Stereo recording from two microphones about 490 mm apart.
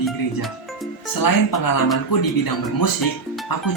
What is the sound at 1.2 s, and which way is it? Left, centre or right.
Speech, left.